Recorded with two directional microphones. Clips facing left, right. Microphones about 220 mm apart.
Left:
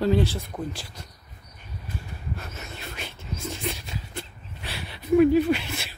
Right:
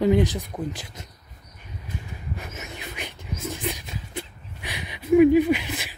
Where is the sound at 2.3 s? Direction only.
15° right (ahead or behind).